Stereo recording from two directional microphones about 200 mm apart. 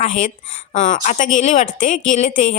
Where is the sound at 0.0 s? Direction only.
40° left (ahead or behind).